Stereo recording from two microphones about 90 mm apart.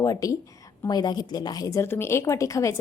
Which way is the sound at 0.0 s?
40° left (ahead or behind).